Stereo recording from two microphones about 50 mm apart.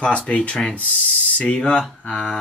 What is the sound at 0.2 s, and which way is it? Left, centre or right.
Speech, centre.